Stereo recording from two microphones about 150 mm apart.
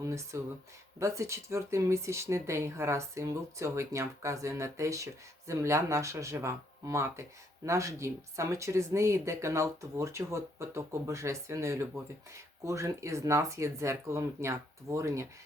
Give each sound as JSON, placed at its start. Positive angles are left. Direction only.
{"t": 0.0, "sound": "speech", "side_deg": -20}